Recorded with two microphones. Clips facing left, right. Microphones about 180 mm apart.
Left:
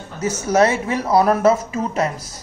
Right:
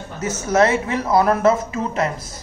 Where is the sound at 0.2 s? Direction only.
30° left (ahead or behind).